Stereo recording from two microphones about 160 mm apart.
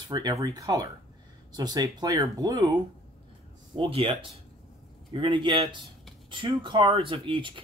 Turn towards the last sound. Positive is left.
turn(degrees=-30)  # may be behind; listen again after turning